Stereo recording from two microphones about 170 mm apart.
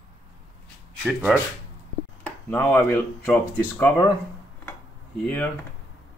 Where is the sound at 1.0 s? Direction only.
5° right (ahead or behind).